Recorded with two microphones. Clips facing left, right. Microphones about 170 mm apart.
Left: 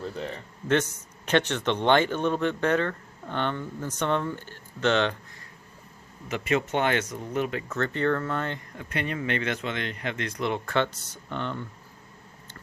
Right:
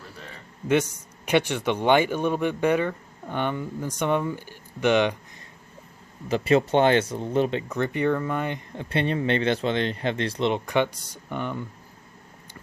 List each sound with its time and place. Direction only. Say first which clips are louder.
0.7 s a man's voice: right 2 dB; 10° right (ahead or behind)
6.2 s speech: right 6 dB; 30° right (ahead or behind)
7.7 s a man's voice: right 2 dB; 15° right (ahead or behind)
8.7 s speech: right 6 dB; 30° right (ahead or behind); by 11.6 s 10° right (ahead or behind)